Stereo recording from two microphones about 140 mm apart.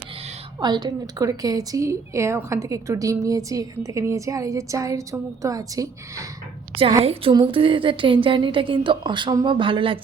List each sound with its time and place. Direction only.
0.6 s a woman's voice: 30° right (ahead or behind)
7.0 s a woman's voice: 40° right (ahead or behind)